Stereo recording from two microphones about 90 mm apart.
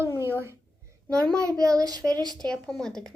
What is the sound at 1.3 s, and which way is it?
Speech, 40° right (ahead or behind).